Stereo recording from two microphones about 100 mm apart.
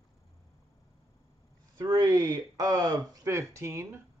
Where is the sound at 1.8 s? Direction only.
40° right (ahead or behind).